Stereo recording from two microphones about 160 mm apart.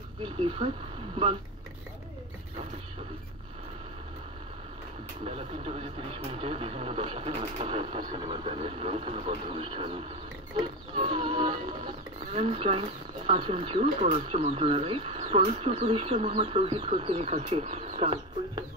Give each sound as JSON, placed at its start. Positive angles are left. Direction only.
{"t": 0.2, "sound": "speech", "side_deg": -30}
{"t": 5.2, "sound": "speech", "side_deg": -40}